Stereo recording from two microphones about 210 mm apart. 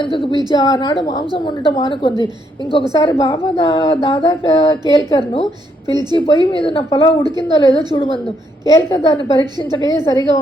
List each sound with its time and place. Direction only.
0.0 s a woman's voice: 25° left (ahead or behind)
5.9 s a woman's voice: 20° right (ahead or behind)
6.1 s speech: 25° left (ahead or behind)
7.3 s a woman's voice: 20° right (ahead or behind)
8.6 s a woman's voice: 20° left (ahead or behind)